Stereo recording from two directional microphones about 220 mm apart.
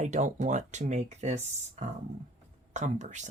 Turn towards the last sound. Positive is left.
turn(degrees=-35)  # may be behind; listen again after turning